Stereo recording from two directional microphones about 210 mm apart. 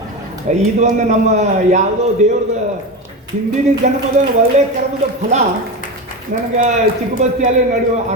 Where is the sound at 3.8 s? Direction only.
35° right (ahead or behind).